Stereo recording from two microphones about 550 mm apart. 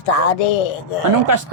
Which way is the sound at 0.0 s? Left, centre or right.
Left.